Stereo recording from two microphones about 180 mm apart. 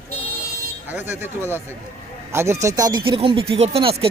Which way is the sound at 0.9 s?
10° right (ahead or behind).